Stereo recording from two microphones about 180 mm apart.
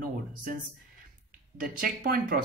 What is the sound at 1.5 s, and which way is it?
Speech, 50° right (ahead or behind).